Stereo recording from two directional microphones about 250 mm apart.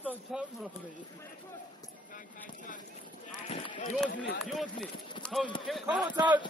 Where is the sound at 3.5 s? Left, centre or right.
Left.